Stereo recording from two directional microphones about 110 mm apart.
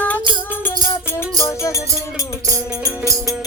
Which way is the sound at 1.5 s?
30° left (ahead or behind).